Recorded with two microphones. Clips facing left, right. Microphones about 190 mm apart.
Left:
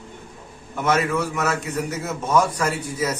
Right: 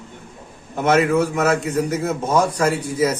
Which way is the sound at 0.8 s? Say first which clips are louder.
Right 5 dB; 30° right (ahead or behind).